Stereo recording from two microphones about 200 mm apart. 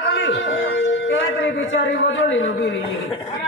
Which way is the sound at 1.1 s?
70° left (ahead or behind).